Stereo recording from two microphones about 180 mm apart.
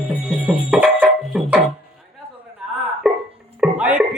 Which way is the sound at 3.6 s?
5° right (ahead or behind).